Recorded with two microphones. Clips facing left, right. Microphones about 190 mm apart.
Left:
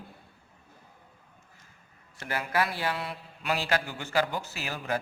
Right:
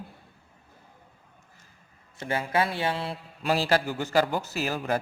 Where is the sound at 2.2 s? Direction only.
25° right (ahead or behind).